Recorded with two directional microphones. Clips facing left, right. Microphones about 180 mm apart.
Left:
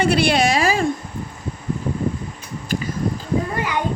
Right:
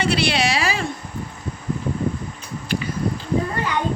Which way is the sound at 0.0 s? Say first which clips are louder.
Left 4 dB; 50° left (ahead or behind).